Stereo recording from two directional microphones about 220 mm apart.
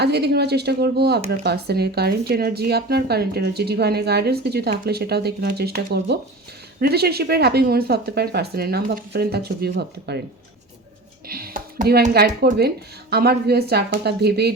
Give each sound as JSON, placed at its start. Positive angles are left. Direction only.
{"t": 0.0, "sound": "speech", "side_deg": -50}
{"t": 11.3, "sound": "speech", "side_deg": -40}